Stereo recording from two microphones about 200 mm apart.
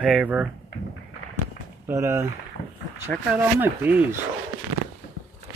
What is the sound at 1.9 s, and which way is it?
Speech, 15° right (ahead or behind).